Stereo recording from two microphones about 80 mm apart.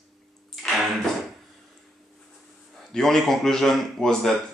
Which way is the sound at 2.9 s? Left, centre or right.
Centre.